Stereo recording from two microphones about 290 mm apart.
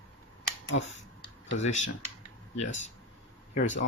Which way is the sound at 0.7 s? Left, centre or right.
Left.